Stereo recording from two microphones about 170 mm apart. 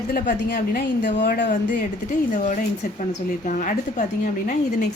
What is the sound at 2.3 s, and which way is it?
A woman's voice, 45° left (ahead or behind).